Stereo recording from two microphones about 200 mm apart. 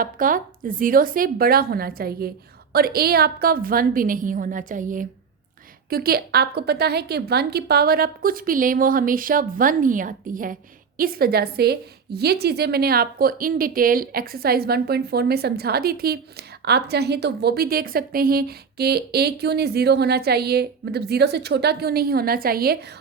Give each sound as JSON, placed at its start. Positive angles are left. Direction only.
{"t": 0.0, "sound": "a woman's voice", "side_deg": -45}